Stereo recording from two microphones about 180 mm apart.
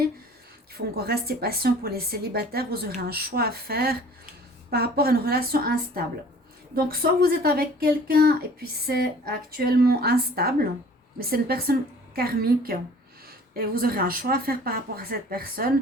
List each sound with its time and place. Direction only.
0.7 s speech: 60° right (ahead or behind)